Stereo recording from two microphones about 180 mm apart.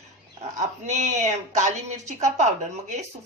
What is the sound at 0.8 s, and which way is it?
A woman's voice, 40° right (ahead or behind).